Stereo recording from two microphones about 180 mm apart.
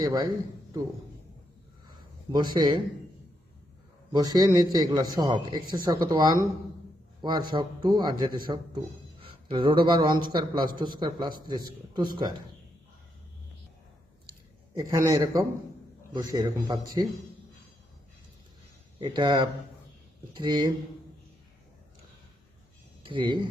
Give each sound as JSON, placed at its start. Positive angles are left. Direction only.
{"t": 0.0, "sound": "a man's voice", "side_deg": -20}
{"t": 2.3, "sound": "a man's voice", "side_deg": -25}
{"t": 4.1, "sound": "a man's voice", "side_deg": -20}
{"t": 9.2, "sound": "a sound", "side_deg": -30}
{"t": 9.8, "sound": "a man's voice", "side_deg": -25}
{"t": 14.8, "sound": "a man's voice", "side_deg": -15}
{"t": 18.9, "sound": "a man's voice", "side_deg": -25}
{"t": 23.0, "sound": "a man's voice", "side_deg": -25}